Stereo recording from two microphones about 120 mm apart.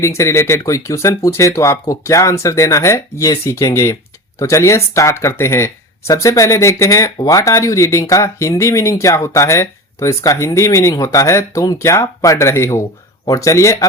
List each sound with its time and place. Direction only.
0.2 s speech: 25° left (ahead or behind)